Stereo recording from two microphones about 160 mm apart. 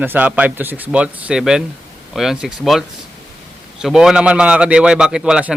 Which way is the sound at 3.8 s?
5° right (ahead or behind).